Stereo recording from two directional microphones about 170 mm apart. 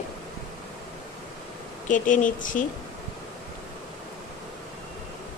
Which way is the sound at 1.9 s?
50° left (ahead or behind).